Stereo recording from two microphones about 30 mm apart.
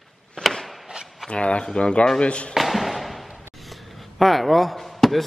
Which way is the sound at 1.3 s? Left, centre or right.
Left.